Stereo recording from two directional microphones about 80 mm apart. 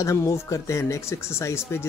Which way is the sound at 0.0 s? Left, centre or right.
Left.